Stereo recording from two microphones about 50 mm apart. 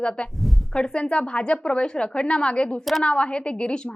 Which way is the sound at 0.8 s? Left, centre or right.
Centre.